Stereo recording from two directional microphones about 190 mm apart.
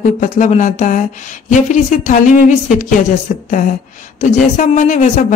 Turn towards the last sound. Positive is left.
turn(degrees=40)  # may be behind; listen again after turning